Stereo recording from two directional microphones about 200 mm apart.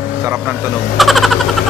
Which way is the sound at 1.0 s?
Centre (ahead or behind).